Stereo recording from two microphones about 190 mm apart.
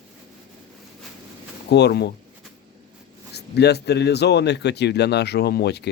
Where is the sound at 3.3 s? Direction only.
60° left (ahead or behind).